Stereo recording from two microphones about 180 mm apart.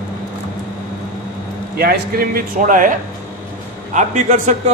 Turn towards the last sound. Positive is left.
turn(degrees=-45)  # may be behind; listen again after turning